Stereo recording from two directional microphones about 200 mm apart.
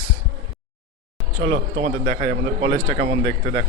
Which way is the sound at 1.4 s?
30° right (ahead or behind).